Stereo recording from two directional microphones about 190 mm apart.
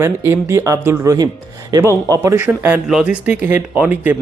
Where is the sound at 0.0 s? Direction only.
15° right (ahead or behind).